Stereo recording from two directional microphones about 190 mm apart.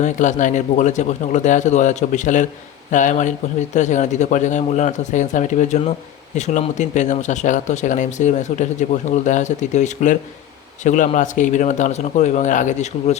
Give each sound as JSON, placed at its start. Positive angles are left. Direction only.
{"t": 0.0, "sound": "speech", "side_deg": 40}